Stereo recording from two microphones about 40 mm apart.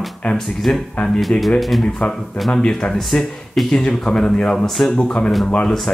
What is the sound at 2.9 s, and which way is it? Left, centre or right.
Speech, centre.